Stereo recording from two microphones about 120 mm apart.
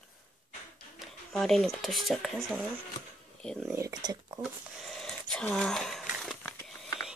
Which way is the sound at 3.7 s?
30° right (ahead or behind).